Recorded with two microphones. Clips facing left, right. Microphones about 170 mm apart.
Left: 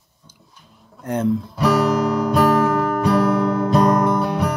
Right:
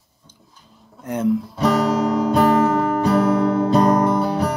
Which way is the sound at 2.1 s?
25° right (ahead or behind).